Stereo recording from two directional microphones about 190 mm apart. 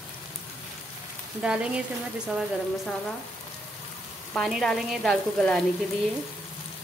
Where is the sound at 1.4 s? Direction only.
5° right (ahead or behind).